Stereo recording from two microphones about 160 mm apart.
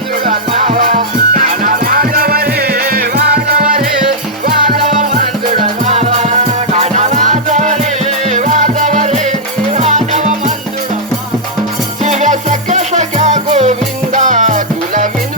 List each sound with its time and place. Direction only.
0.3 s music: 50° right (ahead or behind)
4.9 s music: 50° right (ahead or behind)
5.8 s music: 40° right (ahead or behind)
12.0 s music: 50° right (ahead or behind)